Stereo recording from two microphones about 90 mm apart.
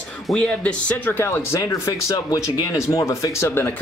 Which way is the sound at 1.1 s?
25° left (ahead or behind).